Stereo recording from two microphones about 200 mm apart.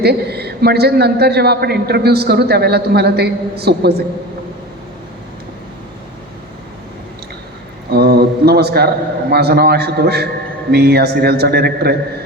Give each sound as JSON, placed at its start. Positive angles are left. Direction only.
{"t": 0.0, "sound": "a man's voice", "side_deg": -55}
{"t": 7.9, "sound": "a sound", "side_deg": -55}
{"t": 9.3, "sound": "a man's voice", "side_deg": -55}